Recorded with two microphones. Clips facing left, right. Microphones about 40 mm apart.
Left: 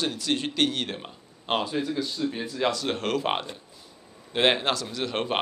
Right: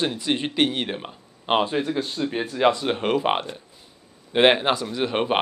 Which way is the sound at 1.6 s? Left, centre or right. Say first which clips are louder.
Right 4 dB; right.